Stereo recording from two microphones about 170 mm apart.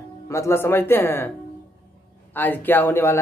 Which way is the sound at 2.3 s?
10° left (ahead or behind).